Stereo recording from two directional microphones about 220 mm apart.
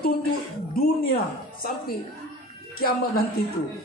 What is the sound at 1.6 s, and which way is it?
A woman's voice, 40° left (ahead or behind).